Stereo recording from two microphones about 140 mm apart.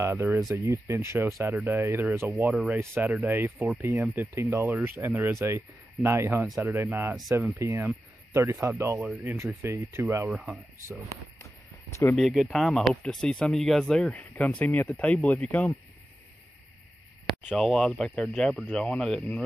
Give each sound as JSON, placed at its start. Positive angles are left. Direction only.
{"t": 0.0, "sound": "speech", "side_deg": -20}
{"t": 2.5, "sound": "speech", "side_deg": -5}
{"t": 12.2, "sound": "speech", "side_deg": 0}
{"t": 17.5, "sound": "speech", "side_deg": 0}